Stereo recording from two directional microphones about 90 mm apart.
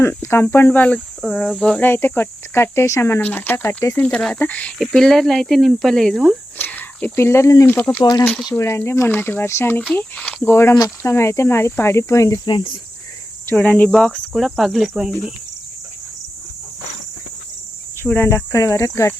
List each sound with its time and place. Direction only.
0.0 s speech: 30° left (ahead or behind)
1.2 s speech: 5° left (ahead or behind)
1.8 s speech: 25° left (ahead or behind)
3.9 s speech: 10° left (ahead or behind)
4.8 s speech: centre (ahead or behind)
6.6 s a sound: 20° left (ahead or behind)
7.2 s speech: 30° left (ahead or behind)
8.5 s speech: 30° left (ahead or behind)
9.9 s speech: 15° left (ahead or behind); by 12.4 s 35° left (ahead or behind)
12.5 s speech: 60° left (ahead or behind)
13.5 s speech: 15° left (ahead or behind); by 15.3 s 5° right (ahead or behind)
18.0 s speech: 25° left (ahead or behind)